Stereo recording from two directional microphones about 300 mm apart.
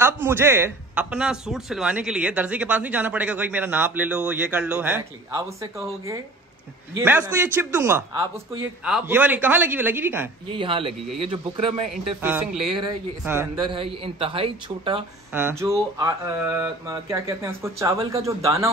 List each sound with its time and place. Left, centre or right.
0.0 s speech: centre
10.5 s speech: centre
12.2 s speech: centre
12.6 s speech: centre
15.3 s speech: centre